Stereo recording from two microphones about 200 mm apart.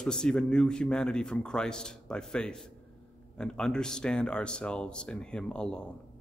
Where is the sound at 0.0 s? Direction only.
5° left (ahead or behind).